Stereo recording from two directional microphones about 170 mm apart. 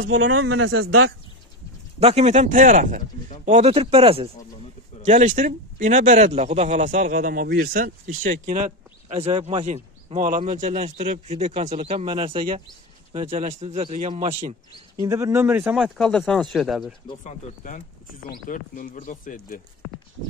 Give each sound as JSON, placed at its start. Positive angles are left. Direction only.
{"t": 0.0, "sound": "a man's voice", "side_deg": -80}
{"t": 2.0, "sound": "speech", "side_deg": -40}
{"t": 3.4, "sound": "speech", "side_deg": -40}
{"t": 5.0, "sound": "speech", "side_deg": -45}
{"t": 15.0, "sound": "speech", "side_deg": -20}
{"t": 17.2, "sound": "speech", "side_deg": 45}